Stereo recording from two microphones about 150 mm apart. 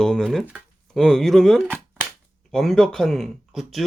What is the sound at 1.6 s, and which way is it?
Cap gun, 10° right (ahead or behind).